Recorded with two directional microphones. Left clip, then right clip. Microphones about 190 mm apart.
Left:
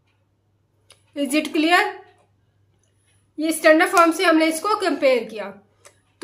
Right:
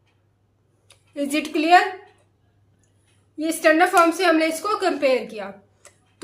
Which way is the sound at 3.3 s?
30° left (ahead or behind).